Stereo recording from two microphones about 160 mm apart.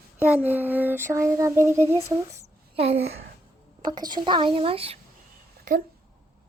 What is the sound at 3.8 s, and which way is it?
Speech, 25° right (ahead or behind).